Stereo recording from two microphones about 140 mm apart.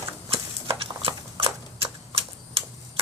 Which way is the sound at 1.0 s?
40° right (ahead or behind).